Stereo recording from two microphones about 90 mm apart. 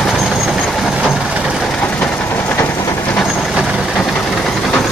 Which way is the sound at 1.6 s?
10° left (ahead or behind).